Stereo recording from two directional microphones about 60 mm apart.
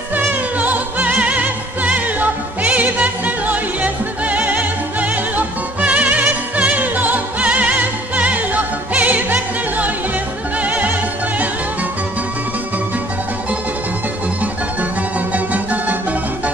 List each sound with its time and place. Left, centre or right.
0.1 s music: right
10.6 s opera: right
14.4 s music: right